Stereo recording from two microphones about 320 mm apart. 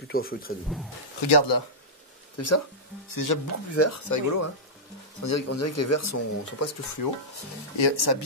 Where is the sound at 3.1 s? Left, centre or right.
Left.